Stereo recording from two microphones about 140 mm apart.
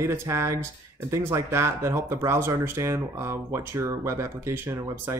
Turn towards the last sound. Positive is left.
turn(degrees=-20)  # may be behind; listen again after turning